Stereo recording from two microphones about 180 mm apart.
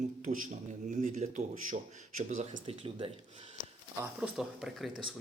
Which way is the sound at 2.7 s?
30° right (ahead or behind).